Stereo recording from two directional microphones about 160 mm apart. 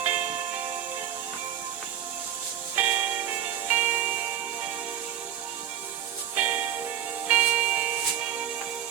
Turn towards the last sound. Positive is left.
turn(degrees=-10)  # may be behind; listen again after turning